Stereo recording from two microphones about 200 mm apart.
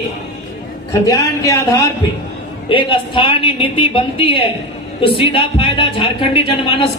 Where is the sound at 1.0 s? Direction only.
15° left (ahead or behind).